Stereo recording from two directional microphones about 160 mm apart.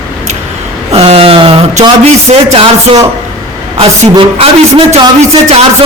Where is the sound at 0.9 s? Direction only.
35° right (ahead or behind).